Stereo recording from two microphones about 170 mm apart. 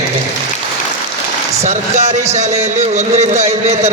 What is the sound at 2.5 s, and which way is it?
Speech, 15° right (ahead or behind).